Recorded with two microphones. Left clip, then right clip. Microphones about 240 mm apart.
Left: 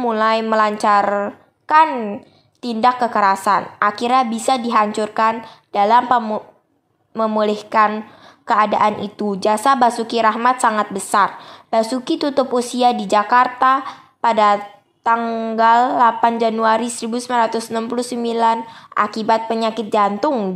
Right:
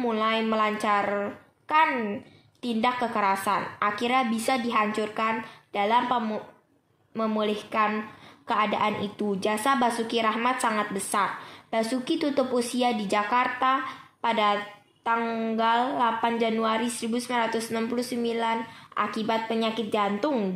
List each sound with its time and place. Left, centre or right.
0.0 s a woman's voice: left